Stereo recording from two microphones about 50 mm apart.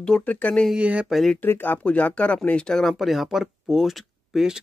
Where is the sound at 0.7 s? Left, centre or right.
Right.